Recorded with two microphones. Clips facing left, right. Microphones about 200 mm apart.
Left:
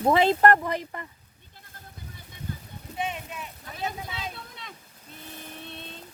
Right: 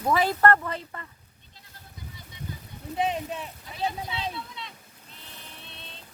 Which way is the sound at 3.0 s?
35° right (ahead or behind).